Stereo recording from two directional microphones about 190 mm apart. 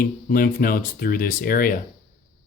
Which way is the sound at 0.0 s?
50° left (ahead or behind).